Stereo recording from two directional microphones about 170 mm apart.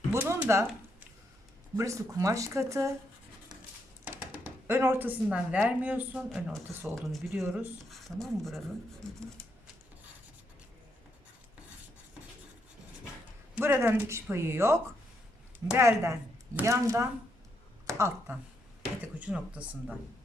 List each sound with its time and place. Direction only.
0.1 s a sound: 15° right (ahead or behind)
1.7 s speech: 20° right (ahead or behind)
4.0 s speech: 10° right (ahead or behind)
13.6 s speech: 10° right (ahead or behind)
15.8 s speech: 15° right (ahead or behind)